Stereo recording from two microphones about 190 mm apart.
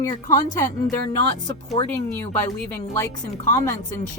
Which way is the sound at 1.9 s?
10° left (ahead or behind).